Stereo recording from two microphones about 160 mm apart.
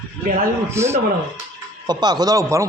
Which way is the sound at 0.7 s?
15° right (ahead or behind).